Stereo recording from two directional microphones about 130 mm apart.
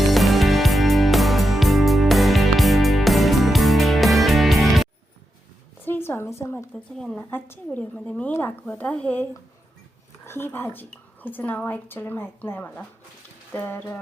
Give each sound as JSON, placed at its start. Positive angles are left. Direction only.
{"t": 0.0, "sound": "music", "side_deg": 0}
{"t": 5.8, "sound": "a sound", "side_deg": 15}
{"t": 7.0, "sound": "a woman's voice", "side_deg": 5}
{"t": 7.3, "sound": "a woman's voice", "side_deg": 15}
{"t": 10.2, "sound": "a woman's voice", "side_deg": 15}